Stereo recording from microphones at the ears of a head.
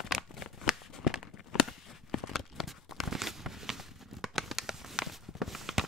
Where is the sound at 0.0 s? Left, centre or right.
Left.